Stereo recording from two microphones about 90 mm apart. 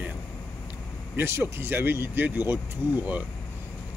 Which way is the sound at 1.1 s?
25° right (ahead or behind).